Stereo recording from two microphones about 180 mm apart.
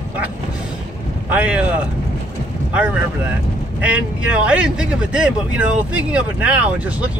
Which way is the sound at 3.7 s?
5° right (ahead or behind).